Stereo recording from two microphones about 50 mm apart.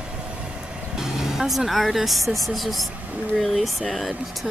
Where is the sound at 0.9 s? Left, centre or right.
Centre.